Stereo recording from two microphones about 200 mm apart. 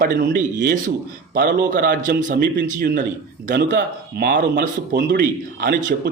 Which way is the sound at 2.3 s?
55° right (ahead or behind).